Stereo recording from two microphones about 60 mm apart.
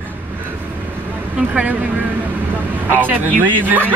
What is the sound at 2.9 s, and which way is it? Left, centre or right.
Speech, right.